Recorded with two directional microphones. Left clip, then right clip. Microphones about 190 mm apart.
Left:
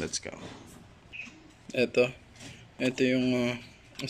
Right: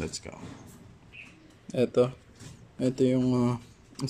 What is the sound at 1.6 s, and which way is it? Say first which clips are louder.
Speech: right 1 dB; 15° right (ahead or behind).